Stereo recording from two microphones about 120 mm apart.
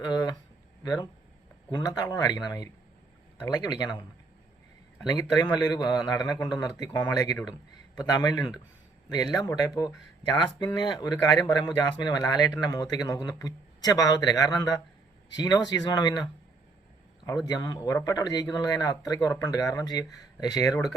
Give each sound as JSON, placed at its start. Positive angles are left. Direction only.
{"t": 0.0, "sound": "a sound", "side_deg": 35}
{"t": 1.7, "sound": "speech", "side_deg": 35}
{"t": 5.0, "sound": "speech", "side_deg": 35}